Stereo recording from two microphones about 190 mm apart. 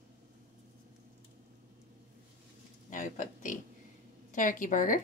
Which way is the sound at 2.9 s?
40° left (ahead or behind).